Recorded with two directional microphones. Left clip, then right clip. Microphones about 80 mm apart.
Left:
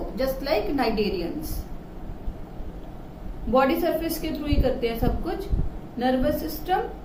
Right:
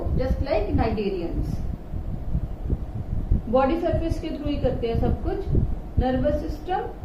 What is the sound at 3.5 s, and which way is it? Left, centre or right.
A woman's voice, left.